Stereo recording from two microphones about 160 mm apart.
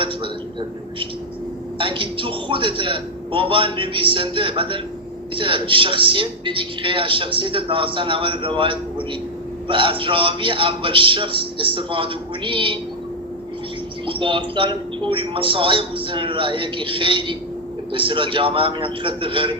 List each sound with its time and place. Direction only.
1.8 s a woman's voice: 30° right (ahead or behind)
14.1 s a woman's voice: 30° right (ahead or behind)